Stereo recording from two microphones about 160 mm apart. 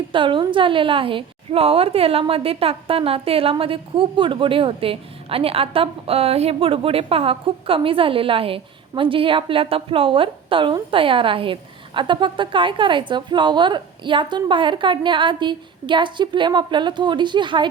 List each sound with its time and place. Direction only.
0.1 s a woman's voice: 30° right (ahead or behind)